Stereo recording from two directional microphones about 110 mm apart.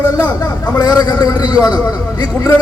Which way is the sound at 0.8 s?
40° left (ahead or behind).